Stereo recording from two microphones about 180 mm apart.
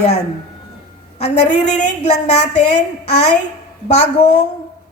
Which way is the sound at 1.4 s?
40° left (ahead or behind).